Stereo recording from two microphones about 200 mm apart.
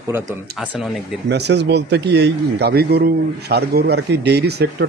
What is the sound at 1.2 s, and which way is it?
A man's voice, 60° right (ahead or behind).